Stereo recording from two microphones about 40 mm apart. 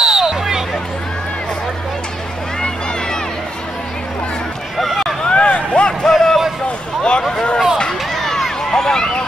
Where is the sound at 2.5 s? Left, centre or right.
Left.